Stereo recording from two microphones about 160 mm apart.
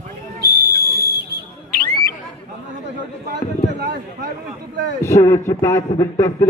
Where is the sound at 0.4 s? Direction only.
75° right (ahead or behind).